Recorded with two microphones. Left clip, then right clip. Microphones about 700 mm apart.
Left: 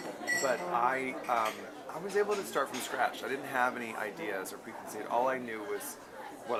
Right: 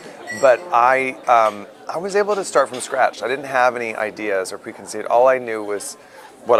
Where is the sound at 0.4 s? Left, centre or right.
Right.